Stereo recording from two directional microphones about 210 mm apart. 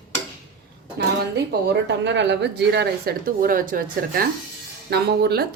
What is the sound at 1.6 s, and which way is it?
Speech, 55° right (ahead or behind).